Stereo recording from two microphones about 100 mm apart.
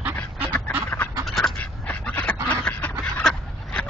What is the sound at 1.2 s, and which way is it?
Duck, centre (ahead or behind).